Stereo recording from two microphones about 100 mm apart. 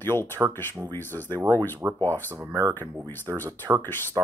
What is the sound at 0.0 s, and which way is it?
Speech, 25° left (ahead or behind).